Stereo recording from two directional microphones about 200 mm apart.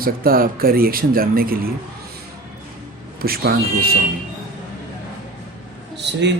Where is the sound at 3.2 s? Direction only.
50° right (ahead or behind).